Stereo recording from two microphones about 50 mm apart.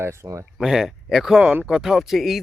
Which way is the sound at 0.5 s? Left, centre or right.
Centre.